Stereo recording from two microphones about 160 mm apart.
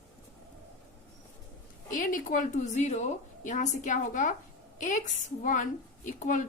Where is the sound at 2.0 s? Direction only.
60° left (ahead or behind).